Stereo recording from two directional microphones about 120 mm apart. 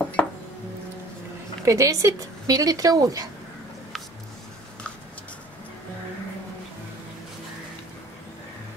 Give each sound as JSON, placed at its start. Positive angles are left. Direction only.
{"t": 0.0, "sound": "music", "side_deg": 10}
{"t": 1.6, "sound": "speech", "side_deg": -25}